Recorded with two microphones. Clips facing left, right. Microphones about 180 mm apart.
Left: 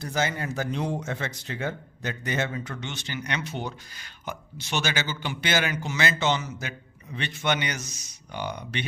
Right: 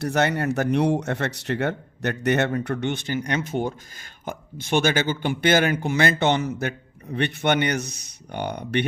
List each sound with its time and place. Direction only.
0.0 s speech: 65° right (ahead or behind)